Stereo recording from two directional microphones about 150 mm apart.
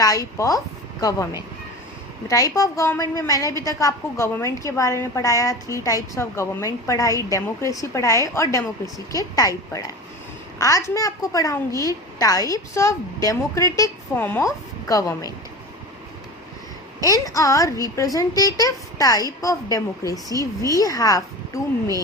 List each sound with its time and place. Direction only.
0.0 s a woman's voice: 25° left (ahead or behind)
2.2 s a woman's voice: 20° left (ahead or behind)
10.6 s a woman's voice: 20° left (ahead or behind)
17.0 s a woman's voice: 25° left (ahead or behind)